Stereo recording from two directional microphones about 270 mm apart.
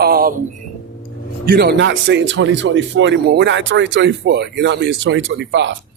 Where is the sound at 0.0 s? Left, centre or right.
Right.